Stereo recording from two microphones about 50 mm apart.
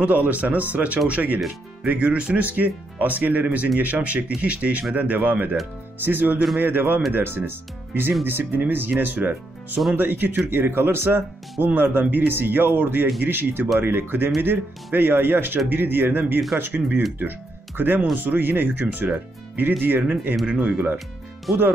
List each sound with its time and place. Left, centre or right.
0.0 s speech: right
11.6 s speech: right